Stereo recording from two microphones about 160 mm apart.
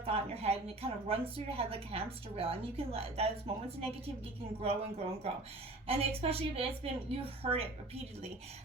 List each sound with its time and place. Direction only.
0.0 s a woman's voice: 35° right (ahead or behind)